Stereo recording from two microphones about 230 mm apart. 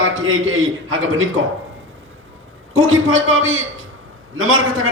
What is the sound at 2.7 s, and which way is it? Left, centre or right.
A man's voice, right.